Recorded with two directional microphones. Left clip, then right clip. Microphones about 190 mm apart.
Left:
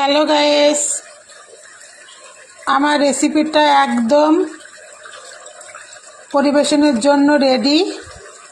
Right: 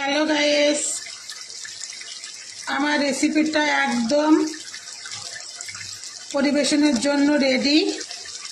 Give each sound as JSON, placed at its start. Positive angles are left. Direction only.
{"t": 0.0, "sound": "a woman's voice", "side_deg": 30}
{"t": 2.7, "sound": "a woman's voice", "side_deg": 25}
{"t": 6.3, "sound": "a woman's voice", "side_deg": 25}